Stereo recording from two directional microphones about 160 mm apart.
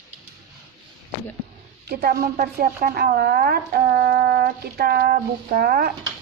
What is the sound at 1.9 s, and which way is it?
Speech, 75° right (ahead or behind).